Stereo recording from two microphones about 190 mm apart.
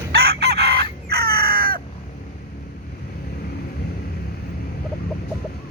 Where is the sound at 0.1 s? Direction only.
60° right (ahead or behind).